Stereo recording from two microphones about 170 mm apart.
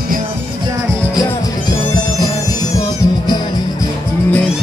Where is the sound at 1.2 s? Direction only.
20° left (ahead or behind).